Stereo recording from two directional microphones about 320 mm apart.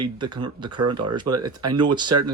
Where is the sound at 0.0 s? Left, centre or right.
Centre.